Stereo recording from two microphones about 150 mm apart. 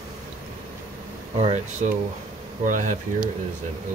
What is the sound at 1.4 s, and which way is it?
Speech, 50° right (ahead or behind).